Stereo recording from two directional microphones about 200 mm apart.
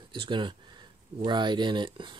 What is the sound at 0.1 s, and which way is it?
Speech, 25° right (ahead or behind).